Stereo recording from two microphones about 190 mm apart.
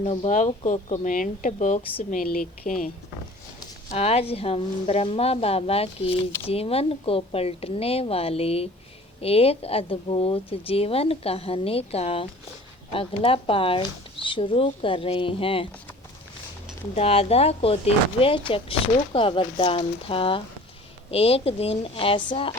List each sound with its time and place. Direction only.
0.0 s a woman's voice: 30° left (ahead or behind)
3.8 s a woman's voice: 30° left (ahead or behind)
16.9 s a woman's voice: 30° left (ahead or behind)